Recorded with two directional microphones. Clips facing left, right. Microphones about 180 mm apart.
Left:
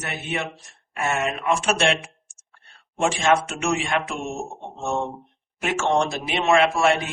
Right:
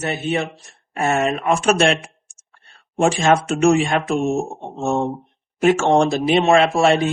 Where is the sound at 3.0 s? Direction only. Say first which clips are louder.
Right 4 dB; 40° right (ahead or behind).